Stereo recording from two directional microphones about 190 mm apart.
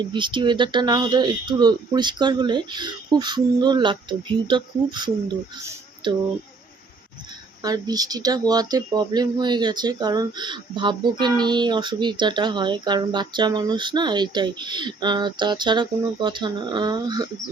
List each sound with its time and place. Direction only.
0.0 s speech: 25° right (ahead or behind)
5.6 s a sound: 25° right (ahead or behind)
7.6 s speech: 20° right (ahead or behind)